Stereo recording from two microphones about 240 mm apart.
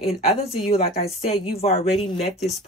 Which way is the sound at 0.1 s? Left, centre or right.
Left.